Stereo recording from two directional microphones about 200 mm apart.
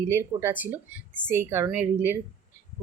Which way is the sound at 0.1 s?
10° right (ahead or behind).